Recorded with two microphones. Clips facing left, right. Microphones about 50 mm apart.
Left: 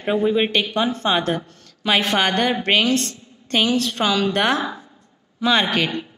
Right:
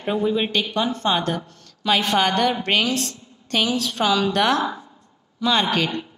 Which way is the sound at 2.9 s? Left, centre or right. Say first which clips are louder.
Left 4 dB; centre.